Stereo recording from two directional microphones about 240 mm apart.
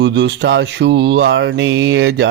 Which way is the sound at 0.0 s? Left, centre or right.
Right.